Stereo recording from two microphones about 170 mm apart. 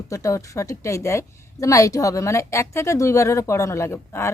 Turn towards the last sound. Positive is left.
turn(degrees=15)  # may be behind; listen again after turning